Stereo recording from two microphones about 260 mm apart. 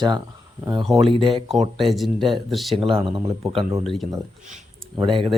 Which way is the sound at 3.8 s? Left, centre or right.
Centre.